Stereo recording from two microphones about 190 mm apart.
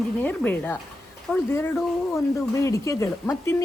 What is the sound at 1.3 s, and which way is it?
Speech, 5° right (ahead or behind).